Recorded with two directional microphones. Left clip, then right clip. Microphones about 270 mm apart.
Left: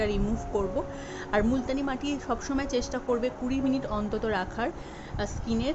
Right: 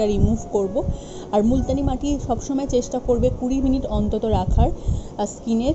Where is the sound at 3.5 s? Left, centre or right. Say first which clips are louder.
Right 6 dB; centre.